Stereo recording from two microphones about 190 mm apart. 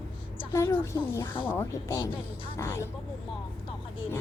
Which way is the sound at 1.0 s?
15° left (ahead or behind).